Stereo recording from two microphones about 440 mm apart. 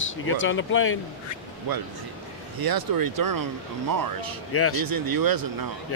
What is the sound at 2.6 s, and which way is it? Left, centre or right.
Speech, right.